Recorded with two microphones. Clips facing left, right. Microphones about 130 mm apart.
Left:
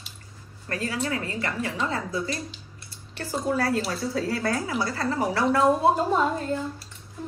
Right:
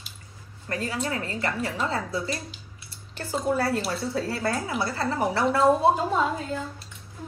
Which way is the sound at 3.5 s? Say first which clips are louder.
Left 2 dB; 25° right (ahead or behind).